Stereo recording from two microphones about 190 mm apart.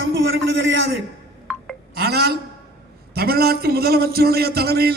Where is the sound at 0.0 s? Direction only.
85° right.